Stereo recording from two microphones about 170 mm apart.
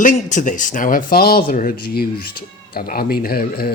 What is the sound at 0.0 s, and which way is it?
Speech, 50° left (ahead or behind).